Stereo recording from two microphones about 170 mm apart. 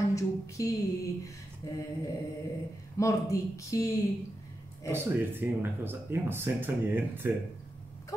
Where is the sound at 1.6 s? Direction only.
20° left (ahead or behind).